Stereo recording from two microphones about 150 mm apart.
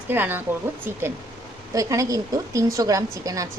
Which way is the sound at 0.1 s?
15° right (ahead or behind).